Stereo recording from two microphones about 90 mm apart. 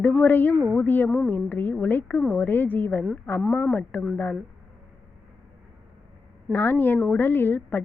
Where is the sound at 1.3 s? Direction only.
20° left (ahead or behind).